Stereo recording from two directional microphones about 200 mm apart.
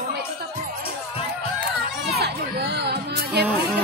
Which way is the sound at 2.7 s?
55° right (ahead or behind).